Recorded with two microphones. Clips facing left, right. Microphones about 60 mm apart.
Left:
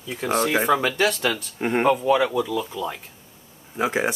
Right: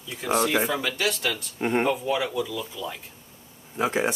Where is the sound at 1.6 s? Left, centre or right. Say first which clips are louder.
Even; centre.